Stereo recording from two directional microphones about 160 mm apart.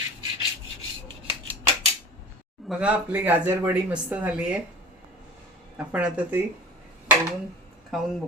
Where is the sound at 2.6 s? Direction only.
5° right (ahead or behind).